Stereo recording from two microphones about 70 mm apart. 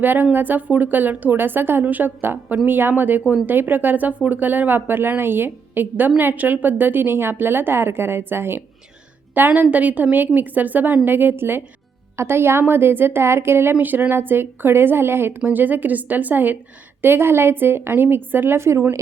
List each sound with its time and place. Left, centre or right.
0.0 s a woman's voice: right
13.7 s a woman's voice: right
15.4 s a woman's voice: right